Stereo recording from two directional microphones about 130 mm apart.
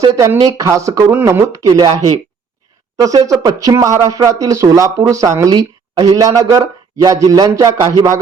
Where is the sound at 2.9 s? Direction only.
25° right (ahead or behind).